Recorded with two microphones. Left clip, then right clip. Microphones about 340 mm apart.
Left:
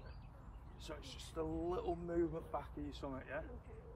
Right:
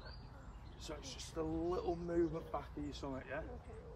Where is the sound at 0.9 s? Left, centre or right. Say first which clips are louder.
Right 2 dB; centre.